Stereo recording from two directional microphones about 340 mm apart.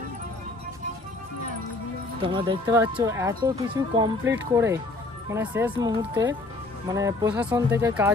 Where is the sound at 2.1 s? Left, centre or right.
Centre.